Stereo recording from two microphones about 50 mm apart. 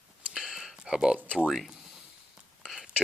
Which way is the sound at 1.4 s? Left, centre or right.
Centre.